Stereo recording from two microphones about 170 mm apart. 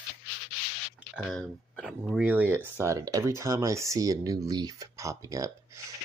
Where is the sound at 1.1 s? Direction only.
Centre (ahead or behind); by 5.5 s 20° right (ahead or behind).